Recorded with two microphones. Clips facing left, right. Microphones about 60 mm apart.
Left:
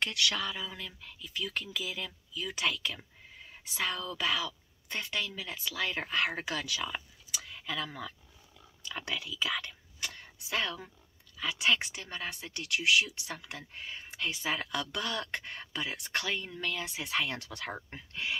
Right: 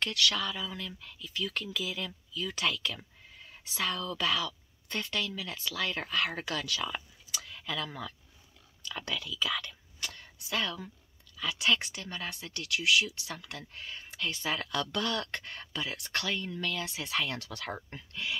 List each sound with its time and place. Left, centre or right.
0.0 s speech: centre